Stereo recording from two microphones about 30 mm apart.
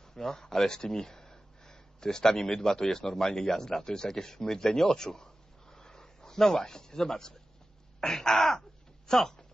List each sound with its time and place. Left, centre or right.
0.1 s speech: centre
8.0 s throat clearing: centre